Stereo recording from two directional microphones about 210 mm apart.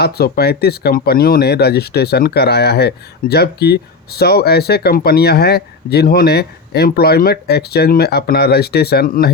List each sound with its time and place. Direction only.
0.0 s speech: 50° left (ahead or behind)